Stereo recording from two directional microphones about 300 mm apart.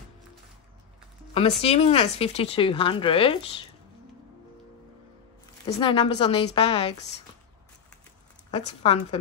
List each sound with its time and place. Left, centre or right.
1.6 s speech: centre
5.7 s speech: centre
8.5 s speech: centre